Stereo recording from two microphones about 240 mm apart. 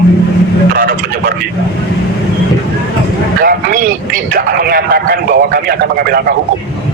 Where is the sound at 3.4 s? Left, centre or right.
Right.